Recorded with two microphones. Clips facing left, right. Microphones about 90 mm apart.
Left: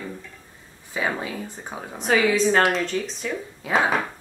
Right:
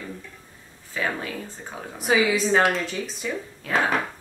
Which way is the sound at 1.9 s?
5° right (ahead or behind).